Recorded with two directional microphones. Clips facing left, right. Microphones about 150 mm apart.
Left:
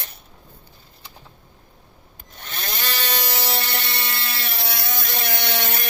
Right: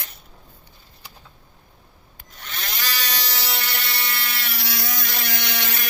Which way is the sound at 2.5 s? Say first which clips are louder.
Left 2 dB; 25° left (ahead or behind).